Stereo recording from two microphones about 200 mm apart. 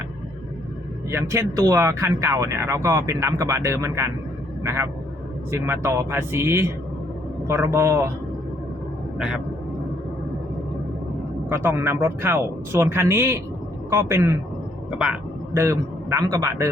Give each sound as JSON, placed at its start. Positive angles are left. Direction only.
{"t": 1.1, "sound": "speech", "side_deg": -15}
{"t": 9.1, "sound": "speech", "side_deg": -5}
{"t": 11.4, "sound": "speech", "side_deg": -10}